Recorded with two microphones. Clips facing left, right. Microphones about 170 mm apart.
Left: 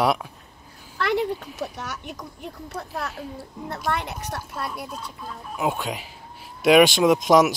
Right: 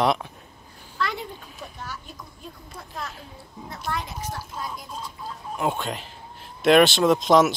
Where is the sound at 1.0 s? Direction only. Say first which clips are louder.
Left 7 dB; 65° left (ahead or behind).